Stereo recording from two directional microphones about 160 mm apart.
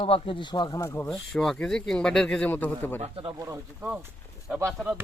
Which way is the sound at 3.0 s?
35° right (ahead or behind).